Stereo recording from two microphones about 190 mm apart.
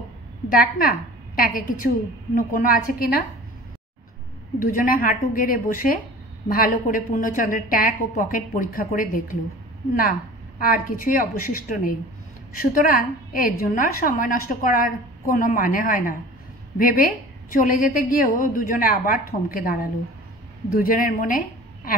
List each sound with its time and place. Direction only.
0.5 s a woman's voice: 50° left (ahead or behind)
4.6 s a woman's voice: 50° left (ahead or behind)
10.6 s a woman's voice: 45° left (ahead or behind)